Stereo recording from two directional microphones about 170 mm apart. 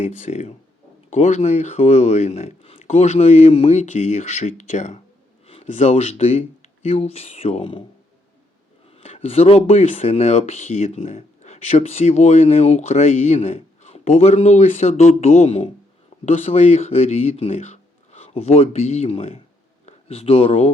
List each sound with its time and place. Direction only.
0.0 s speech: 45° left (ahead or behind)
9.0 s speech: 40° left (ahead or behind)